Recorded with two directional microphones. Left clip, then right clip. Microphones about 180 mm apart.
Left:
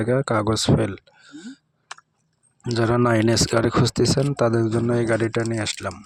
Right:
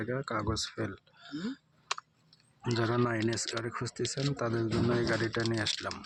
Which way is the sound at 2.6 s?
40° left (ahead or behind).